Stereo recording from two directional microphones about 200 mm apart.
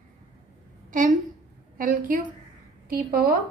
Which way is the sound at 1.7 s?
45° right (ahead or behind).